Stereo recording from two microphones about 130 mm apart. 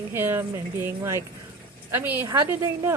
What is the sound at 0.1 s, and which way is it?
A woman's voice, 15° right (ahead or behind).